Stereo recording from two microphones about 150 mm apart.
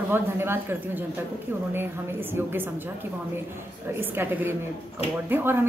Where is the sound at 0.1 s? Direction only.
15° right (ahead or behind).